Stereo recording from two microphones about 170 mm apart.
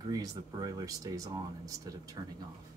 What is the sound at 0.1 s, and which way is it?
Speech, 20° right (ahead or behind).